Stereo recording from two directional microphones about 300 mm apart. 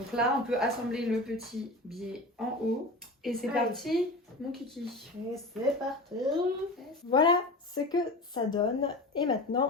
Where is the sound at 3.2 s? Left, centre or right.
Centre.